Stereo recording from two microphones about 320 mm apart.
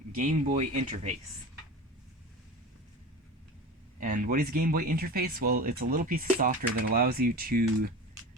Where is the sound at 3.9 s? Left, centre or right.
Right.